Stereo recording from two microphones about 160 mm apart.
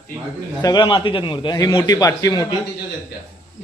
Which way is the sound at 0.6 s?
25° left (ahead or behind).